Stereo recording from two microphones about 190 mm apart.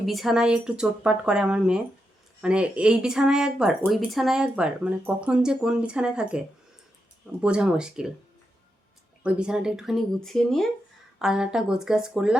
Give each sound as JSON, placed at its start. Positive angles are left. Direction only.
{"t": 0.0, "sound": "speech", "side_deg": 0}
{"t": 7.4, "sound": "speech", "side_deg": -5}
{"t": 9.2, "sound": "speech", "side_deg": -5}